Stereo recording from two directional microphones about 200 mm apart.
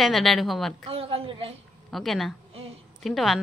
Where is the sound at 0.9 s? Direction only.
30° right (ahead or behind).